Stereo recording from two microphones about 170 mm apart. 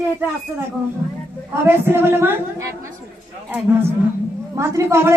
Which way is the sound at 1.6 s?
15° right (ahead or behind).